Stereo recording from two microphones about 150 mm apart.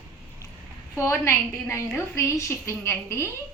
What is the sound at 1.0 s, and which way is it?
A woman's voice, 15° left (ahead or behind).